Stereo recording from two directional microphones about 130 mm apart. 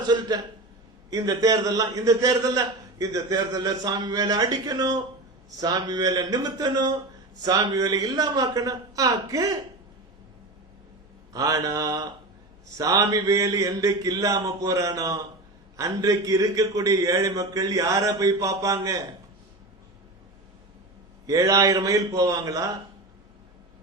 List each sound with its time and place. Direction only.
1.1 s a man's voice: 30° right (ahead or behind)
11.3 s a man's voice: 30° right (ahead or behind)
21.2 s a man's voice: 25° right (ahead or behind)